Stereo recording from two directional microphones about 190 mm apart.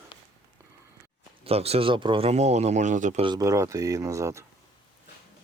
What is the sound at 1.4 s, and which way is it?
Speech, 30° right (ahead or behind).